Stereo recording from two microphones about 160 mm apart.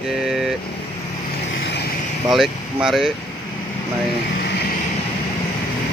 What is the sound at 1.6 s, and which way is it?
Vehicle, 90° left.